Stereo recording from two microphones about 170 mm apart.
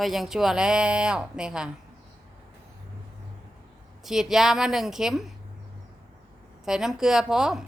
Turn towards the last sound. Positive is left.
turn(degrees=-5)  # may be behind; listen again after turning